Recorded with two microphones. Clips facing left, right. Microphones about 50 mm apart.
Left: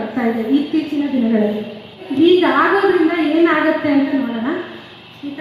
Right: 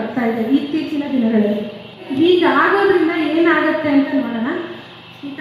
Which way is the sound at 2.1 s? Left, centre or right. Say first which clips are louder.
Left 1 dB; centre.